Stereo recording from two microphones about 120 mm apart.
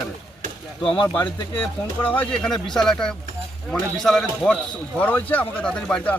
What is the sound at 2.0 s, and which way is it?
Speech, 15° left (ahead or behind).